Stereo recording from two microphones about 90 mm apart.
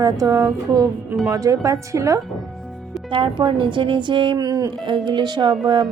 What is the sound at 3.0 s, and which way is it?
Speech, 70° right (ahead or behind).